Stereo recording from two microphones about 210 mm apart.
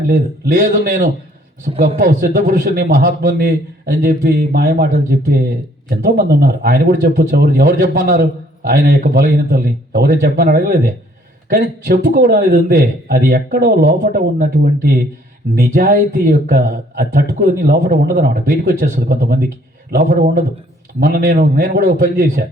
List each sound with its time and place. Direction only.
0.1 s a man's voice: 40° right (ahead or behind)